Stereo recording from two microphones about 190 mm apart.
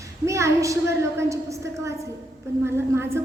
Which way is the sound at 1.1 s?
15° right (ahead or behind).